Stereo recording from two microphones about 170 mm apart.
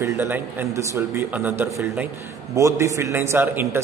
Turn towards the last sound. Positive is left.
turn(degrees=-15)  # may be behind; listen again after turning